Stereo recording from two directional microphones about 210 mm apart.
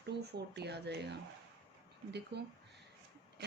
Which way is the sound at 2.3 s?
50° right (ahead or behind).